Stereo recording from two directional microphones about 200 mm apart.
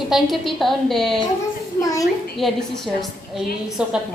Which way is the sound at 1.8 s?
15° left (ahead or behind).